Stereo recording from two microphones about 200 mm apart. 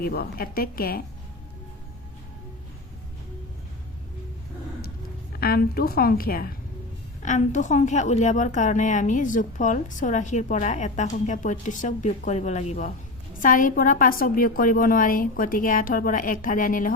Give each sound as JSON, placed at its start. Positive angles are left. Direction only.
{"t": 0.0, "sound": "a woman's voice", "side_deg": 50}
{"t": 5.4, "sound": "a woman's voice", "side_deg": 50}